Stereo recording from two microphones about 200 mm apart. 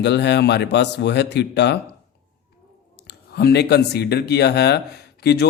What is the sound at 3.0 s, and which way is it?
Speech, 55° left (ahead or behind).